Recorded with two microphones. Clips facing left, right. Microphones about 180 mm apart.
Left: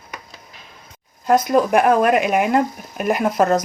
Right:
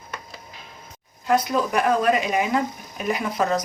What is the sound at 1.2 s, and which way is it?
Speech, 45° left (ahead or behind).